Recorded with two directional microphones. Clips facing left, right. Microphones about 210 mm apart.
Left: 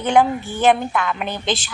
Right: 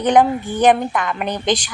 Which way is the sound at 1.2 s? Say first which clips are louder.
Right 4 dB; 15° right (ahead or behind).